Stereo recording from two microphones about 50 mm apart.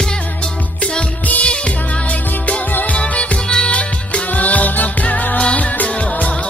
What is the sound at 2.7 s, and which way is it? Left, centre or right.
Music, left.